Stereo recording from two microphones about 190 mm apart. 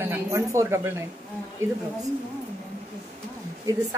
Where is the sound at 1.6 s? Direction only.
90° right.